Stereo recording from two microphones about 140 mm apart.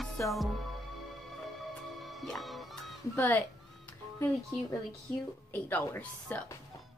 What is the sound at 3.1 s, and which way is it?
Speech, 15° left (ahead or behind).